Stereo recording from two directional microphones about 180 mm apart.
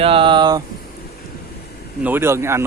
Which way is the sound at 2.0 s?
10° right (ahead or behind).